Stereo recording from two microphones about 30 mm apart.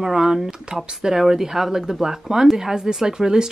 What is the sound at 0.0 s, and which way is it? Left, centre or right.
Speech, centre.